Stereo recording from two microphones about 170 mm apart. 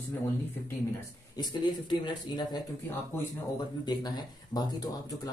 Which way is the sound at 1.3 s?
25° left (ahead or behind).